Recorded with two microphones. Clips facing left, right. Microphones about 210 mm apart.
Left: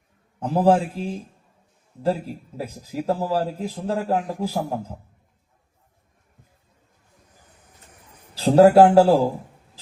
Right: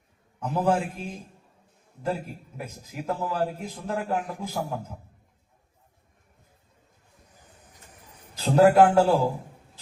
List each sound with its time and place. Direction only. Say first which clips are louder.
0.3 s a man's voice: left 6 dB; 30° left (ahead or behind)
8.4 s a man's voice: left 5 dB; 35° left (ahead or behind)